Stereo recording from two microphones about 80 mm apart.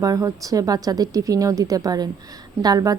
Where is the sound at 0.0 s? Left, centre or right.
Right.